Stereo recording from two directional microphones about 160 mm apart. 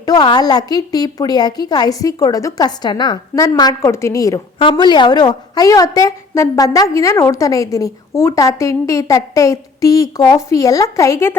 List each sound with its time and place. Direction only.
0.0 s a woman's voice: 25° left (ahead or behind)